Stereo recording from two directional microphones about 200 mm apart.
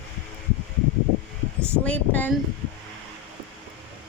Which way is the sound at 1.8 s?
10° left (ahead or behind).